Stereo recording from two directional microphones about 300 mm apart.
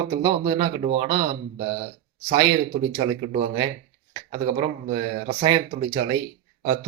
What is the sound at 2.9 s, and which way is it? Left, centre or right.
Speech, centre.